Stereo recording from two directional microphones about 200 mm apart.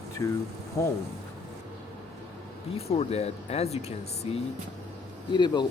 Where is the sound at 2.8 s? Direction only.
30° left (ahead or behind).